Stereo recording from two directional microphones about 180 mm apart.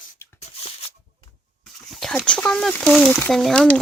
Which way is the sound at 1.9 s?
Centre (ahead or behind).